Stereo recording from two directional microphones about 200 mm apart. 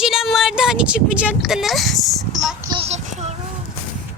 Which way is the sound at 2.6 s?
25° right (ahead or behind).